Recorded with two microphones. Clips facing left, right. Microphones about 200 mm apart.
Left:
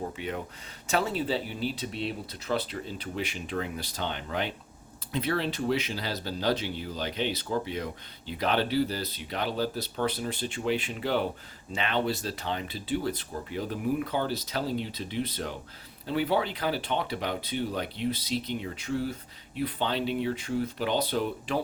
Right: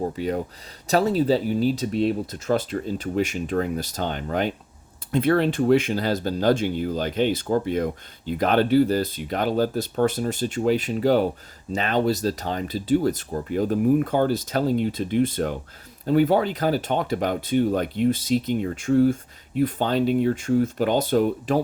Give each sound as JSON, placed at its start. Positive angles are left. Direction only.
{"t": 0.2, "sound": "speech", "side_deg": -40}